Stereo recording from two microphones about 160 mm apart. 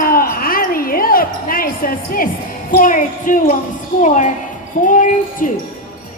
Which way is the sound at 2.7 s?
60° left (ahead or behind).